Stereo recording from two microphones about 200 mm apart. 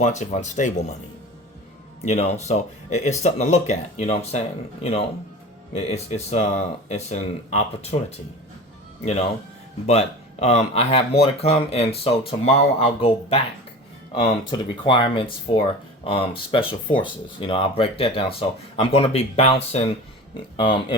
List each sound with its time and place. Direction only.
0.0 s speech: 35° left (ahead or behind)
2.0 s speech: 35° left (ahead or behind)
9.8 s speech: 30° left (ahead or behind)
14.8 s speech: 25° left (ahead or behind)